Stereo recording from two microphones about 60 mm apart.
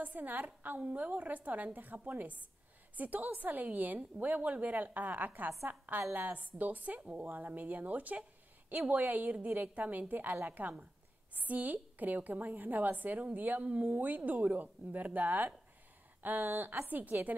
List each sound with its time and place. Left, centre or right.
0.0 s a woman's voice: right
7.2 s a woman's voice: right